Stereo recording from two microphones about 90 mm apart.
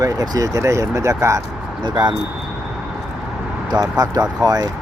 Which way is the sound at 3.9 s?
45° right (ahead or behind).